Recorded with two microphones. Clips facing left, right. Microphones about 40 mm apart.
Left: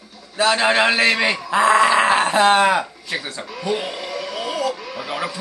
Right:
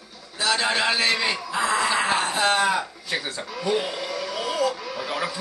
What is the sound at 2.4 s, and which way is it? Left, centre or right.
Speech, left.